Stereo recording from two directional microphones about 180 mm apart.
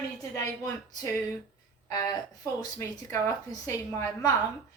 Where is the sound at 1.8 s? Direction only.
20° left (ahead or behind).